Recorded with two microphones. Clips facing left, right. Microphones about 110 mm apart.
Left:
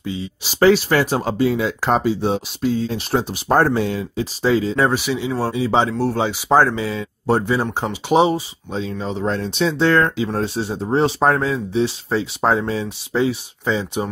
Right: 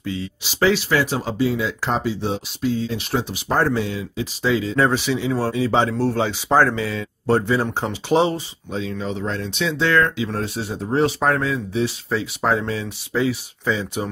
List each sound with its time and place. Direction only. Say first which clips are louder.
0.0 s speech: left 1 dB; 20° left (ahead or behind)
0.4 s speech: left 5 dB; 45° left (ahead or behind)
4.4 s speech: left 3 dB; 35° left (ahead or behind)
4.7 s speech: even; 10° left (ahead or behind)
8.7 s speech: left 1 dB; 30° left (ahead or behind)